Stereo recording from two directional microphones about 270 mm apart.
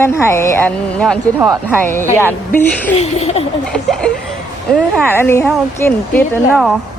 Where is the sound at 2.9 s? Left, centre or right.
Left.